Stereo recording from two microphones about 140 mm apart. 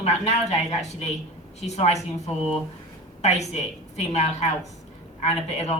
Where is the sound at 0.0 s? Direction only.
55° left (ahead or behind).